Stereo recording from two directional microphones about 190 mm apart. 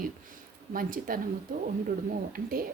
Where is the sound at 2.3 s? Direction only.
50° right (ahead or behind).